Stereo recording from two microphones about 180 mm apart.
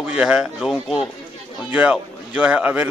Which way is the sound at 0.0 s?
5° right (ahead or behind).